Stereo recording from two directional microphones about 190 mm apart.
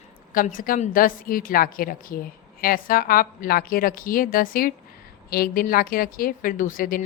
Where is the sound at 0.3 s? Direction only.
45° left (ahead or behind).